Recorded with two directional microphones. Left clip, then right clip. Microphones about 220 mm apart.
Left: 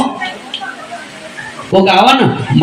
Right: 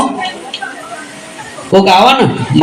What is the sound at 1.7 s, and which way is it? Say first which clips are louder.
Speech: right 2 dB; 30° right (ahead or behind).